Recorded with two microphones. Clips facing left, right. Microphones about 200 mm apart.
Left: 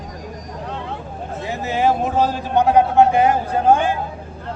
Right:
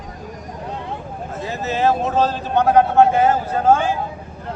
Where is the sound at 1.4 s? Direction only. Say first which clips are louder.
Even; 15° left (ahead or behind).